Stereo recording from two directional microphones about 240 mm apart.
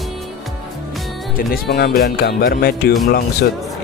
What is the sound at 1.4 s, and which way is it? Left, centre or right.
Speech, left.